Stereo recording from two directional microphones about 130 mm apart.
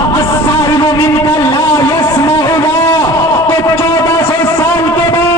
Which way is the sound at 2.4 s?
20° left (ahead or behind).